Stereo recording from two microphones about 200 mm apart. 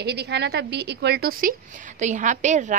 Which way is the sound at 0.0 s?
55° right (ahead or behind).